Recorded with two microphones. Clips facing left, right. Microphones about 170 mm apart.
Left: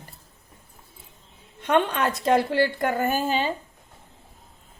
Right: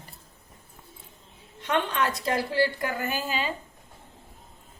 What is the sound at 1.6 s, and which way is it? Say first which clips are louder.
A woman's voice: left 4 dB; 50° left (ahead or behind).